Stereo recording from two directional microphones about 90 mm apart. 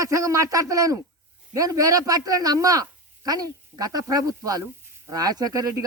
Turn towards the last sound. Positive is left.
turn(degrees=-45)  # may be behind; listen again after turning